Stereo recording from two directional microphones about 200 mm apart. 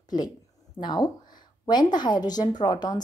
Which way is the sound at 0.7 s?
20° left (ahead or behind).